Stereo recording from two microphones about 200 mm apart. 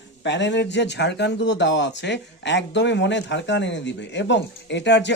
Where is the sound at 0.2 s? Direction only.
60° left (ahead or behind).